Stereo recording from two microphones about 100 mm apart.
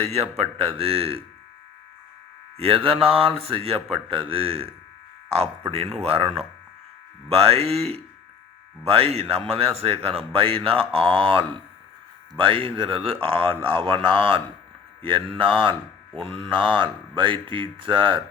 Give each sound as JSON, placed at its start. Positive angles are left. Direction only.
{"t": 0.0, "sound": "speech", "side_deg": -90}
{"t": 2.6, "sound": "speech", "side_deg": -70}
{"t": 6.0, "sound": "speech", "side_deg": -85}
{"t": 7.3, "sound": "speech", "side_deg": -90}